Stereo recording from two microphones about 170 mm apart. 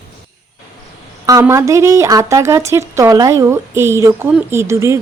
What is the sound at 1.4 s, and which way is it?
A woman's voice, 15° right (ahead or behind).